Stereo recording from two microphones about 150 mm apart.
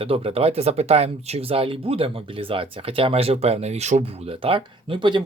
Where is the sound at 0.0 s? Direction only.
40° right (ahead or behind).